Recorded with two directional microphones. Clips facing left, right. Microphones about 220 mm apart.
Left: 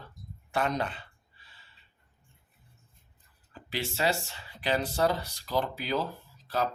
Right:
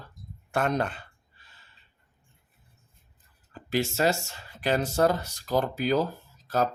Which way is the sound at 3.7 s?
45° right (ahead or behind).